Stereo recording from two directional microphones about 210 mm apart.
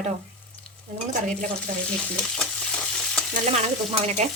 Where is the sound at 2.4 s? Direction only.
5° left (ahead or behind).